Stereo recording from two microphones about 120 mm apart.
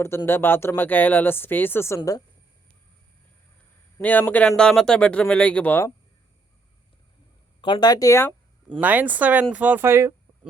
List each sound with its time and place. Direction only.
0.3 s speech: 20° left (ahead or behind)
3.9 s speech: 15° left (ahead or behind)
7.6 s speech: 40° left (ahead or behind)
8.8 s speech: 15° right (ahead or behind)